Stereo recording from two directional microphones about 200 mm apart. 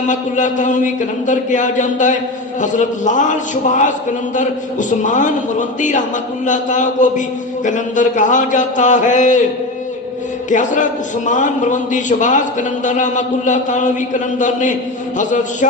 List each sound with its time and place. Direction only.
0.1 s a man's voice: 40° left (ahead or behind)
10.5 s a man's voice: 40° left (ahead or behind)